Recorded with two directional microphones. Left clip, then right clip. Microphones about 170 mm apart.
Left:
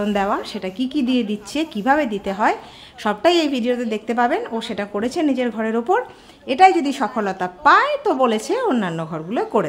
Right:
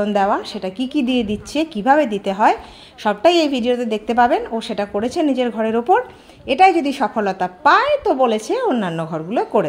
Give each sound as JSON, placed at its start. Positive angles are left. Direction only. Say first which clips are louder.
{"t": 0.0, "sound": "a woman's voice", "louder": "right 3 dB", "side_deg": 5}